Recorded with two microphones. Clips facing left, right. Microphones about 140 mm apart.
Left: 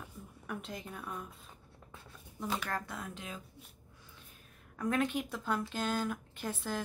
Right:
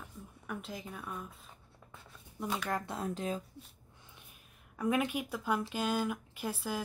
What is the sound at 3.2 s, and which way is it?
Speech, 35° right (ahead or behind).